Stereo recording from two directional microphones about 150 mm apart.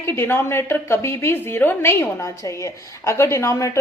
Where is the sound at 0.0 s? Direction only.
15° left (ahead or behind).